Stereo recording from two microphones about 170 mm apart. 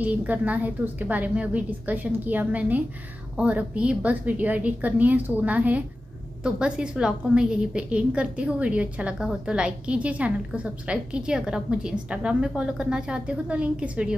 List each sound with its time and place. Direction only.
0.0 s a woman's voice: 10° right (ahead or behind)